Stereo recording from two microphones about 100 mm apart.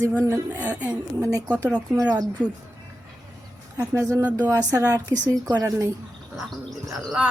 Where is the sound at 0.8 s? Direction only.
35° right (ahead or behind).